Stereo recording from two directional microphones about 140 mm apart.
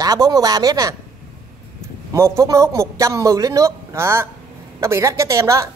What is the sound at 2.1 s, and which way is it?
A woman's voice, 20° right (ahead or behind).